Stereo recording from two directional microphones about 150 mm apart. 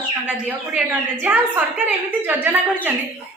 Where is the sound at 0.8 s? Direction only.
10° right (ahead or behind).